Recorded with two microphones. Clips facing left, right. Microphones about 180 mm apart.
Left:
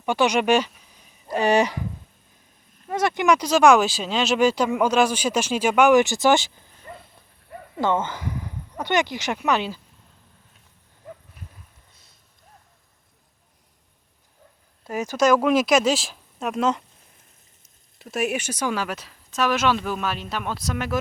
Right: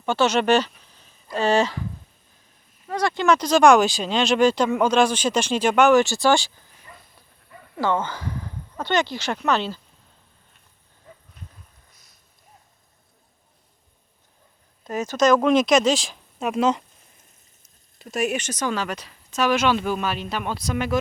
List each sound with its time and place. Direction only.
0.0 s speech: 15° left (ahead or behind)
2.9 s speech: 20° left (ahead or behind)
7.8 s speech: 20° left (ahead or behind)
14.8 s speech: 10° left (ahead or behind)
18.0 s speech: 5° left (ahead or behind)